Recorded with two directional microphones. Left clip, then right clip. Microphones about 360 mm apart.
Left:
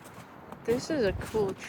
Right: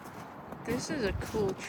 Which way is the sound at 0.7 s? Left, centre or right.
Centre.